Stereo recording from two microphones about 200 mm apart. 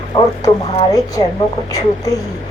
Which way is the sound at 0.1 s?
25° left (ahead or behind).